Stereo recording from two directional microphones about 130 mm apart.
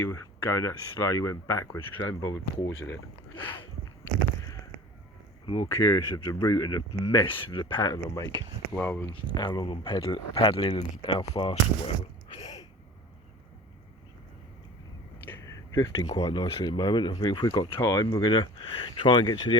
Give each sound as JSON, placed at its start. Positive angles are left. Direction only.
{"t": 0.0, "sound": "speech", "side_deg": 20}
{"t": 5.6, "sound": "speech", "side_deg": 25}
{"t": 8.4, "sound": "speech", "side_deg": 15}
{"t": 9.2, "sound": "speech", "side_deg": 35}
{"t": 12.3, "sound": "a sound", "side_deg": 35}
{"t": 15.2, "sound": "speech", "side_deg": 20}
{"t": 17.7, "sound": "speech", "side_deg": 25}